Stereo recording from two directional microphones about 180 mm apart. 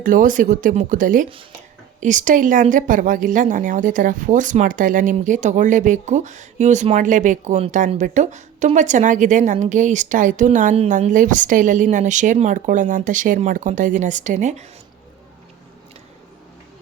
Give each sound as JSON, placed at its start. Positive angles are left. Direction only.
{"t": 0.0, "sound": "speech", "side_deg": -50}